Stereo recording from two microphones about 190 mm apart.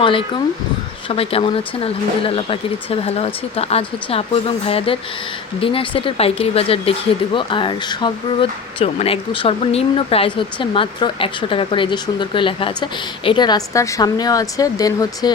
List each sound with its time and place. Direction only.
0.0 s speech: 25° left (ahead or behind)